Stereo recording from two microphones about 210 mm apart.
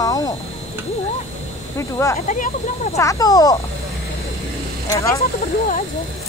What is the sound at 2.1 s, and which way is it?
Speech, 35° left (ahead or behind).